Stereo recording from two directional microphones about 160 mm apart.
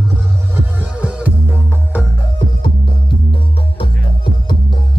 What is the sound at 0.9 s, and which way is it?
Music, 10° right (ahead or behind).